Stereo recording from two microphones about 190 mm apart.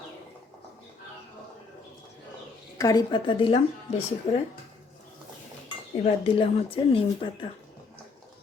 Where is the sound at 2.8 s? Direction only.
20° left (ahead or behind).